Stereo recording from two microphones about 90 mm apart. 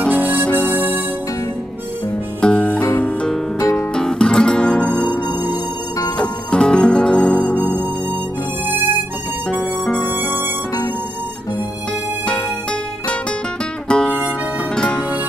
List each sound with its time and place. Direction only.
0.1 s harmonica: 20° right (ahead or behind)
0.7 s music: 25° right (ahead or behind)
2.4 s music: 10° left (ahead or behind)
3.5 s music: 35° left (ahead or behind)
3.9 s guitar: 10° left (ahead or behind)
6.1 s music: 10° left (ahead or behind)
9.5 s harmonica: 10° left (ahead or behind)
13.8 s music: 10° left (ahead or behind)